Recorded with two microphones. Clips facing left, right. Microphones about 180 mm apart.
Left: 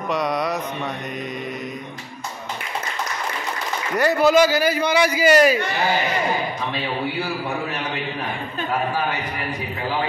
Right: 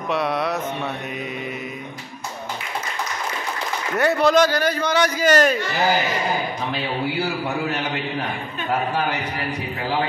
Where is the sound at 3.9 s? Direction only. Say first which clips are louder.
Left 1 dB; centre (ahead or behind).